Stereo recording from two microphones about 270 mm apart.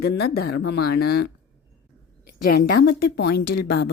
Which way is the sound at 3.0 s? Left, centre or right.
Left.